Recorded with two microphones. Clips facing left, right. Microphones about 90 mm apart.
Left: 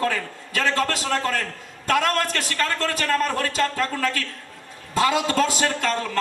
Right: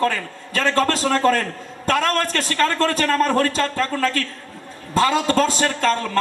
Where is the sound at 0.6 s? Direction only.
40° right (ahead or behind).